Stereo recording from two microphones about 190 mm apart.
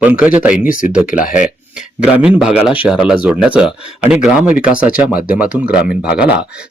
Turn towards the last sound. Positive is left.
turn(degrees=-5)  # may be behind; listen again after turning